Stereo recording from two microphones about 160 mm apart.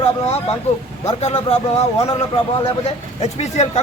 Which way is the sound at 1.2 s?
40° left (ahead or behind).